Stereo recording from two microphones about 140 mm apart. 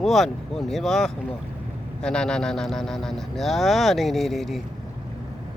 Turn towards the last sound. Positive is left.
turn(degrees=0)  # may be behind; listen again after turning